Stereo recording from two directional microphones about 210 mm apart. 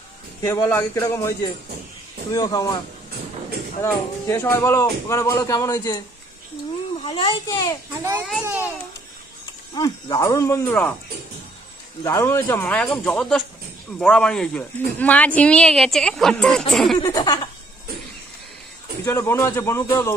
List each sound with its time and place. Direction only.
0.4 s speech: 15° left (ahead or behind)
3.8 s speech: 10° left (ahead or behind)
8.3 s a child's voice: 10° right (ahead or behind)
9.8 s speech: 20° left (ahead or behind)
12.0 s a woman's voice: 15° left (ahead or behind)
17.0 s speech: 20° left (ahead or behind)
19.0 s speech: 15° left (ahead or behind)